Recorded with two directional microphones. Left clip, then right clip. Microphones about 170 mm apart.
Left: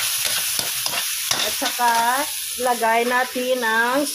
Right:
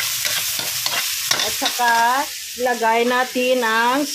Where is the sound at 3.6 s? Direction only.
35° right (ahead or behind).